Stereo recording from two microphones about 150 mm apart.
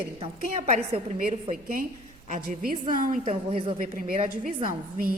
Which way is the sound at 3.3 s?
35° right (ahead or behind).